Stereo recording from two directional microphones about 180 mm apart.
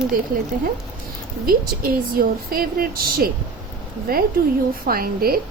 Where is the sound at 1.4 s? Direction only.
55° right (ahead or behind).